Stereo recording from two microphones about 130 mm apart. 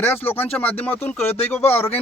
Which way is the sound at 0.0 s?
15° left (ahead or behind).